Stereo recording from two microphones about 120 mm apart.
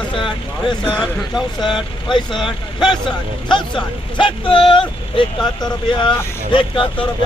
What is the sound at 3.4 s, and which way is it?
Speech, 40° left (ahead or behind).